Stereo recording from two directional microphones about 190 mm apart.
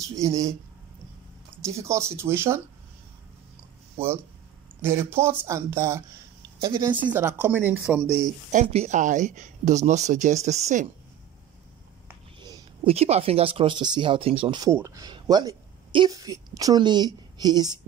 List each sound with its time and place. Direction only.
0.1 s speech: 15° right (ahead or behind)
1.6 s speech: 15° right (ahead or behind)
4.8 s speech: 15° right (ahead or behind)
8.5 s speech: 40° right (ahead or behind)
12.4 s speech: 25° right (ahead or behind)